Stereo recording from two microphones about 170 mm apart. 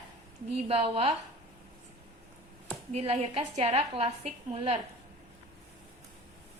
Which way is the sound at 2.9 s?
35° right (ahead or behind).